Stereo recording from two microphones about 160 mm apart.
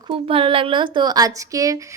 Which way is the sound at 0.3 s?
35° right (ahead or behind).